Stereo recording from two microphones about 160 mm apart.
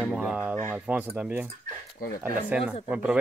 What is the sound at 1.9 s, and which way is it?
Speech, 65° left (ahead or behind).